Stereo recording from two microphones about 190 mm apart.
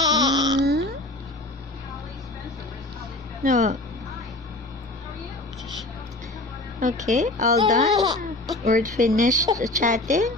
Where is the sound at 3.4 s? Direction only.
40° right (ahead or behind).